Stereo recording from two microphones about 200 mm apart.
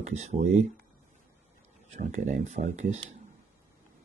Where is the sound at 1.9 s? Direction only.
40° right (ahead or behind).